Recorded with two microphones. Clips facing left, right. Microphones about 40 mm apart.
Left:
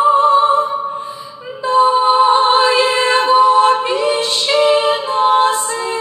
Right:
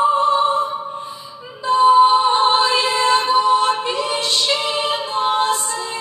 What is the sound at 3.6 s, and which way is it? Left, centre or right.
A capella, left.